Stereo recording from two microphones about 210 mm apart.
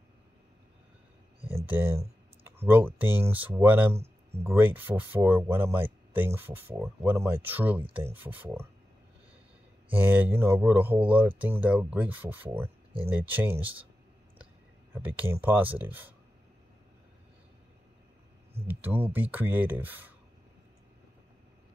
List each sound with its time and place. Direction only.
1.7 s speech: 10° right (ahead or behind)
9.8 s speech: 10° right (ahead or behind)
12.6 s a sound: 25° right (ahead or behind)
13.1 s speech: 10° right (ahead or behind)
15.0 s speech: 10° right (ahead or behind)
18.7 s speech: 10° right (ahead or behind)